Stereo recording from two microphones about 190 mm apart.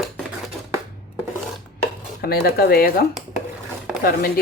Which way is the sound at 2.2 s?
55° left (ahead or behind).